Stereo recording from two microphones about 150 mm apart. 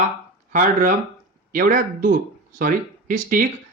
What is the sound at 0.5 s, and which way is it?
Speech, 65° right (ahead or behind).